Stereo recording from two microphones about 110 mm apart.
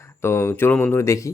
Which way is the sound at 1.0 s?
25° left (ahead or behind).